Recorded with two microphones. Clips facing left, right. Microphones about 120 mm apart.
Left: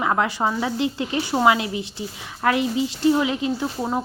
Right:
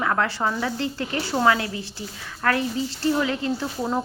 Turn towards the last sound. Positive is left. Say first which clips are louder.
# left 1 dB
turn(degrees=10)  # may be behind; listen again after turning